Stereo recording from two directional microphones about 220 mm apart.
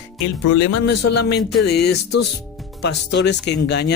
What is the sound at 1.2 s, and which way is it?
Speech, 45° left (ahead or behind).